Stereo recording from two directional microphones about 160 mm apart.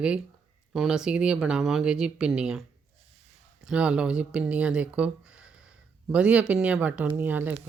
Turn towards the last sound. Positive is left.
turn(degrees=-10)  # may be behind; listen again after turning